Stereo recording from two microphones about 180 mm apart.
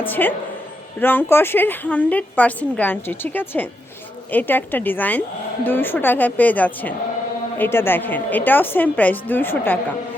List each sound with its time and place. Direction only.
0.1 s a woman's voice: 10° left (ahead or behind)